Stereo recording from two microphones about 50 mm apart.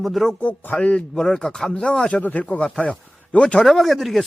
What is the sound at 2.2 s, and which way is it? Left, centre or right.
Speech, left.